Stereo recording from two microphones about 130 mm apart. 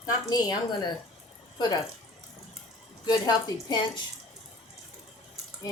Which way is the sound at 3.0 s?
30° left (ahead or behind).